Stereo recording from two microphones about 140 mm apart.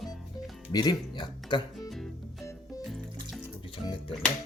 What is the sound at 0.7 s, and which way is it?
Speech, 30° left (ahead or behind).